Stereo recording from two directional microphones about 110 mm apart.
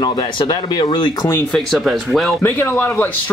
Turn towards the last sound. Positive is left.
turn(degrees=20)  # may be behind; listen again after turning